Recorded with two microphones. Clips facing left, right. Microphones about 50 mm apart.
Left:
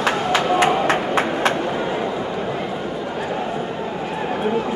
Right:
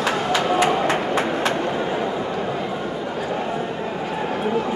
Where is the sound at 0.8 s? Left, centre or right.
Left.